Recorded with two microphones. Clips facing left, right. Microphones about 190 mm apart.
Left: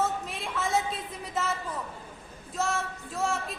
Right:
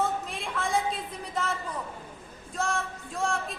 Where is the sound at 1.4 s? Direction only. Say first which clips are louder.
Even; 5° left (ahead or behind).